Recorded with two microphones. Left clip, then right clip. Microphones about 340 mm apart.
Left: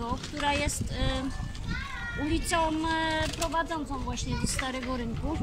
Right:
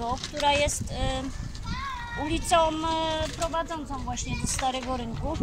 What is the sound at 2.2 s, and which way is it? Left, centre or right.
Speech, centre.